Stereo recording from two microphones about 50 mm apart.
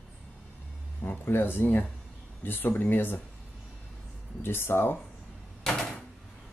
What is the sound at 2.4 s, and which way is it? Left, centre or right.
Speech, left.